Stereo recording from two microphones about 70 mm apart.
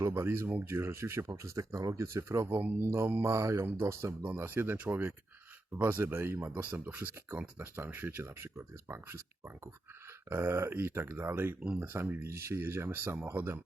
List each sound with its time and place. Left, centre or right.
0.1 s speech: right
4.4 s speech: right
10.2 s speech: right